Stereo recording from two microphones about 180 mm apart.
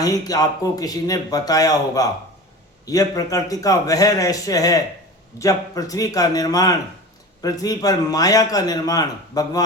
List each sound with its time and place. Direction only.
0.0 s a man's voice: 20° left (ahead or behind)